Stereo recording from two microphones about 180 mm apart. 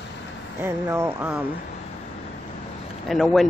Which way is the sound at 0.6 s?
10° right (ahead or behind).